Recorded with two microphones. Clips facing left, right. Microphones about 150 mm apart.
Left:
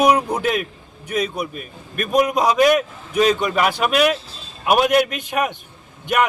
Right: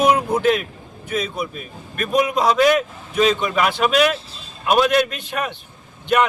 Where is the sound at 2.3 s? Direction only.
10° left (ahead or behind).